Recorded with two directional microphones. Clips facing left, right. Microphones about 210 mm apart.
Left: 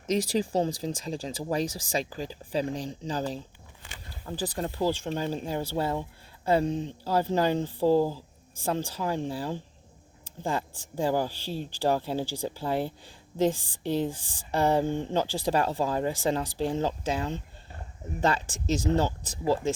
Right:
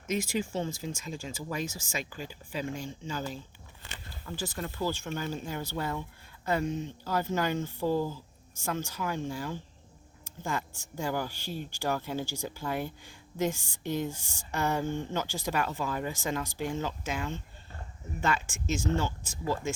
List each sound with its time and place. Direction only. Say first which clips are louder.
0.1 s speech: left 5 dB; 35° left (ahead or behind)
3.8 s a sound: even; 5° left (ahead or behind)
4.3 s speech: left 5 dB; 35° left (ahead or behind)